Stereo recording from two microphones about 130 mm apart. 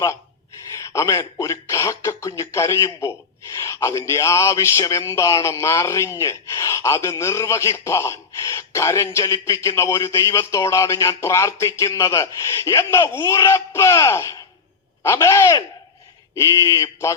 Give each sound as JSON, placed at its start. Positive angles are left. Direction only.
{"t": 0.7, "sound": "speech", "side_deg": 25}